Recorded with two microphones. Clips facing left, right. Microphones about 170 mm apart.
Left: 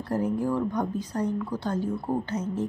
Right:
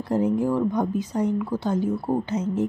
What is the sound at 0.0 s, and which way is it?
A woman's voice, 15° right (ahead or behind).